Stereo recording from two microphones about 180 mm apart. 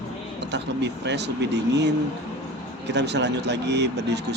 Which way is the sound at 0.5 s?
75° right (ahead or behind).